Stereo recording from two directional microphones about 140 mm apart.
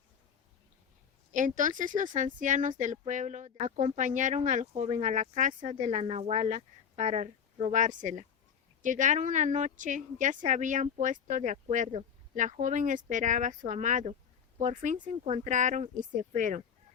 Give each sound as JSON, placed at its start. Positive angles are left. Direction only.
{"t": 1.3, "sound": "speech", "side_deg": -65}